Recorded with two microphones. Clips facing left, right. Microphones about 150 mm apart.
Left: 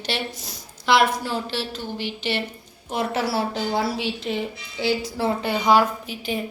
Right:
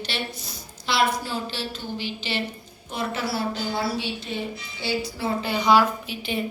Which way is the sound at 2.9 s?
85° left.